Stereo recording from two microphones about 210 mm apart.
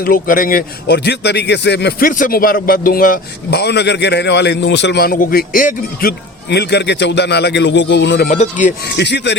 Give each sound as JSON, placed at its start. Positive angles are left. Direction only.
{"t": 0.0, "sound": "a man's voice", "side_deg": 40}
{"t": 8.3, "sound": "speech", "side_deg": 35}
{"t": 9.0, "sound": "speech", "side_deg": 55}